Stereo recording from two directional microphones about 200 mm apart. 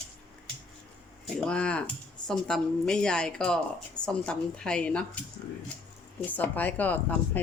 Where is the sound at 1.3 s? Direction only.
5° left (ahead or behind).